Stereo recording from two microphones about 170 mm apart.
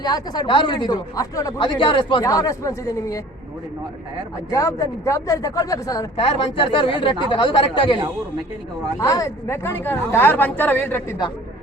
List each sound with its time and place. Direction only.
0.0 s speech: 25° left (ahead or behind)
1.5 s speech: 30° left (ahead or behind)
4.5 s speech: 20° left (ahead or behind)
6.2 s speech: 30° left (ahead or behind)
9.0 s speech: 20° left (ahead or behind)